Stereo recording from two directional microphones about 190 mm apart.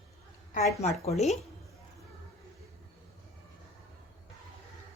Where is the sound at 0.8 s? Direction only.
35° left (ahead or behind).